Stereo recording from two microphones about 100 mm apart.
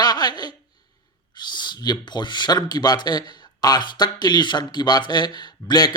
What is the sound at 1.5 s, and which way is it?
Speech, 45° left (ahead or behind).